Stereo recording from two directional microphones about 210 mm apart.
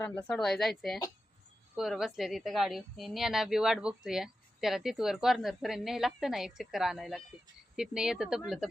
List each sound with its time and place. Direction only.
0.0 s a woman's voice: 5° left (ahead or behind)